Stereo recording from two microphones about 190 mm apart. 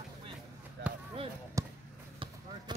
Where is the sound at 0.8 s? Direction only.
65° right (ahead or behind).